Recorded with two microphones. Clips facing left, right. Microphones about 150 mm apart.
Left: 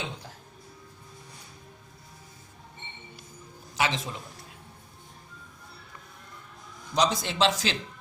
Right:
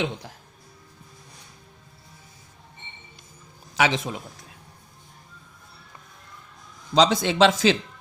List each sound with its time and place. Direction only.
3.8 s speech: 75° right (ahead or behind)
6.9 s speech: 75° right (ahead or behind)